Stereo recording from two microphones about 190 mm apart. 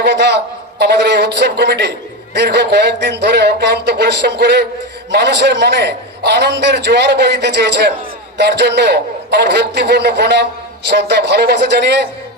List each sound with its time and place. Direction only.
0.0 s a man's voice: 65° right (ahead or behind)